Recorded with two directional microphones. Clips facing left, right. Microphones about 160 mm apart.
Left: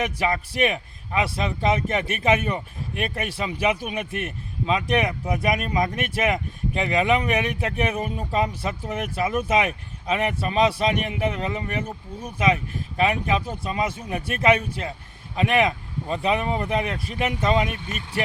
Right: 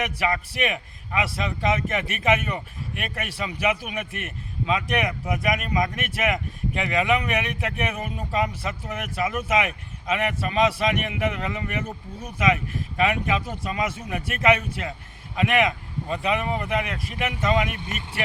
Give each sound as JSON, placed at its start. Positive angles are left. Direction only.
{"t": 0.0, "sound": "a man's voice", "side_deg": 30}